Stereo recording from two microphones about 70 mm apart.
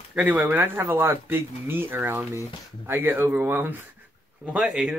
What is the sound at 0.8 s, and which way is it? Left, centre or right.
Speech, right.